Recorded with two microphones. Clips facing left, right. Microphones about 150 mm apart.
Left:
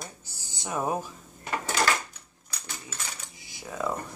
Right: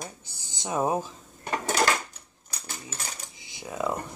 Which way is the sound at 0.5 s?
20° right (ahead or behind).